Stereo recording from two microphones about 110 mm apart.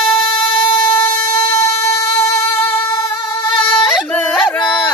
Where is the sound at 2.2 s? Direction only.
25° left (ahead or behind).